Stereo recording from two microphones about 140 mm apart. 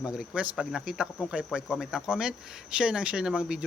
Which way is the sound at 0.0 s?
5° right (ahead or behind).